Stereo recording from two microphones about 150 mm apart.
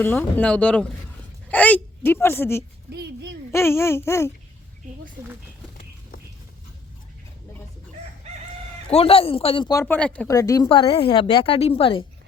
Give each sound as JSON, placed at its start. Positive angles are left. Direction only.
{"t": 0.0, "sound": "speech", "side_deg": 10}
{"t": 2.9, "sound": "speech", "side_deg": -90}
{"t": 3.5, "sound": "speech", "side_deg": 15}
{"t": 8.9, "sound": "a woman's voice", "side_deg": 40}
{"t": 9.8, "sound": "speech", "side_deg": 10}
{"t": 10.2, "sound": "speech", "side_deg": 20}
{"t": 10.7, "sound": "a woman's voice", "side_deg": 35}